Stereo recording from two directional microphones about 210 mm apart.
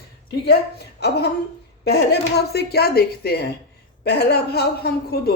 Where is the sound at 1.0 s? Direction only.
50° left (ahead or behind).